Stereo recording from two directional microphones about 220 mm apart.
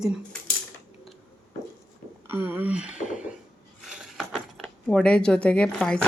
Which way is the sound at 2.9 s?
35° left (ahead or behind).